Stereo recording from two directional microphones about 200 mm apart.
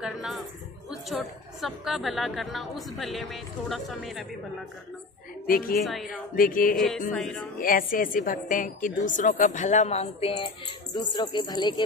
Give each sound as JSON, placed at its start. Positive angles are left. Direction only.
{"t": 0.0, "sound": "a woman's voice", "side_deg": 0}
{"t": 5.5, "sound": "a sound", "side_deg": 45}
{"t": 5.8, "sound": "a woman's voice", "side_deg": 0}
{"t": 6.3, "sound": "a sound", "side_deg": 45}
{"t": 7.2, "sound": "a woman's voice", "side_deg": 0}
{"t": 7.6, "sound": "a woman's voice", "side_deg": 45}